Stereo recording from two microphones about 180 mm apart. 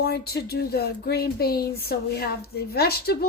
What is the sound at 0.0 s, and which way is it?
Speech, 65° left (ahead or behind).